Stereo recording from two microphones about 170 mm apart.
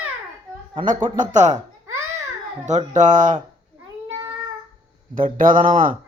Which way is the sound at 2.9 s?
45° right (ahead or behind).